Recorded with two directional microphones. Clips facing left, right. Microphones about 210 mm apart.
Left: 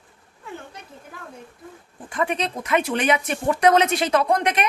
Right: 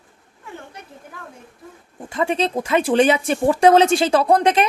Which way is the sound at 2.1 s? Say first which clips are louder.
Right 4 dB; 25° right (ahead or behind).